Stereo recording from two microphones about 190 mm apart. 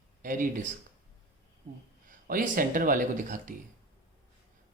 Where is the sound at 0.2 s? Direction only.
45° right (ahead or behind).